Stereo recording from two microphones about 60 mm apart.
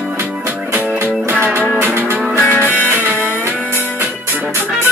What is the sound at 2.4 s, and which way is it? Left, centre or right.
Music, left.